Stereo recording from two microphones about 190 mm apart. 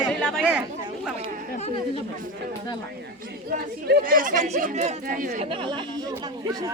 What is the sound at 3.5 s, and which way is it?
Speech, 50° right (ahead or behind).